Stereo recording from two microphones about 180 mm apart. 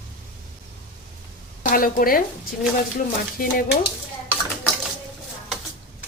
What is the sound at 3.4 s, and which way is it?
Speech, 55° left (ahead or behind).